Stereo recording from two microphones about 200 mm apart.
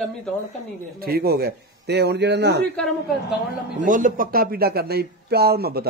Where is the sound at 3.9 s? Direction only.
40° right (ahead or behind).